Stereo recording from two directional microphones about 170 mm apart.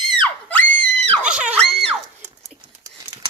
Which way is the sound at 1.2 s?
5° right (ahead or behind).